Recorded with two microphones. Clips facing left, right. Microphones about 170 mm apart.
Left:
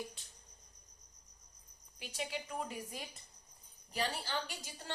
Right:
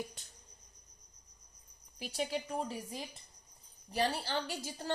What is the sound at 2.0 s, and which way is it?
Speech, 35° right (ahead or behind).